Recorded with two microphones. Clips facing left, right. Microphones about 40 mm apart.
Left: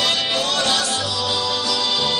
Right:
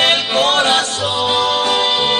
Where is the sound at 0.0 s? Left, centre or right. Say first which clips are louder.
Right 6 dB; right.